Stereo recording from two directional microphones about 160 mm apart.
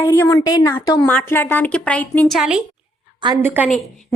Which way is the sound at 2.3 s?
5° right (ahead or behind).